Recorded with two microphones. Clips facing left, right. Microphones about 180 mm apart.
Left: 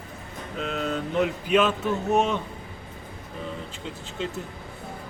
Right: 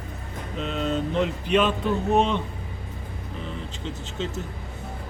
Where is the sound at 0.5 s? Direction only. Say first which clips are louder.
Right 2 dB; centre (ahead or behind).